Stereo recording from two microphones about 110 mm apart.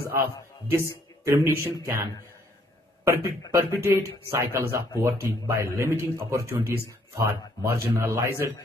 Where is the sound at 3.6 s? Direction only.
25° right (ahead or behind).